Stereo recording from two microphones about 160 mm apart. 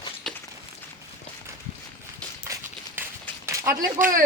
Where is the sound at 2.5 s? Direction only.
15° right (ahead or behind).